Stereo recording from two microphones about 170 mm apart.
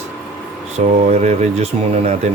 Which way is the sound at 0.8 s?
40° right (ahead or behind).